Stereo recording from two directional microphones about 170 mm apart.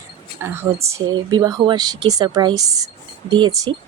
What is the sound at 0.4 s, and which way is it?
Speech, 15° right (ahead or behind).